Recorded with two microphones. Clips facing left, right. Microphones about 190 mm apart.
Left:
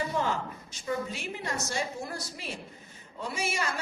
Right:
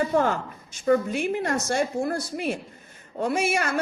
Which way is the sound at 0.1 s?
50° right (ahead or behind).